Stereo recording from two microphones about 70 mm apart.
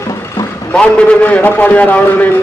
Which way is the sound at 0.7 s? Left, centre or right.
Centre.